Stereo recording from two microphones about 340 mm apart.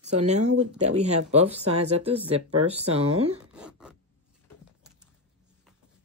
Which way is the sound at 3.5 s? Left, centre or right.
Centre.